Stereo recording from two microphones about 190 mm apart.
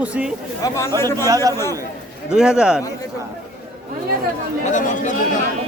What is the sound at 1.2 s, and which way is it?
Speech, 20° right (ahead or behind).